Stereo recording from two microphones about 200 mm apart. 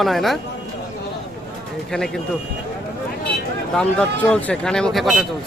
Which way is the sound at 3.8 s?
5° left (ahead or behind).